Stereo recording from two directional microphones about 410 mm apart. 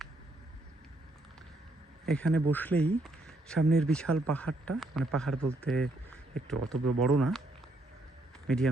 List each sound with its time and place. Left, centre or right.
2.0 s speech: centre
3.0 s a sound: centre
3.7 s speech: centre
6.7 s speech: right
7.2 s speech: centre
8.4 s speech: centre